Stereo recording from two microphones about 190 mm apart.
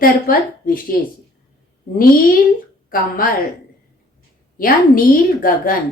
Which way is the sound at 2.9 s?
45° left (ahead or behind).